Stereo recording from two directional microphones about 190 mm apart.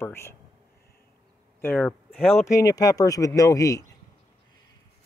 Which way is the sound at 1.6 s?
10° left (ahead or behind).